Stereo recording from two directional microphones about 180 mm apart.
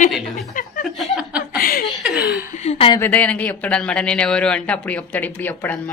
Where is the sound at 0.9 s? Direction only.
5° right (ahead or behind).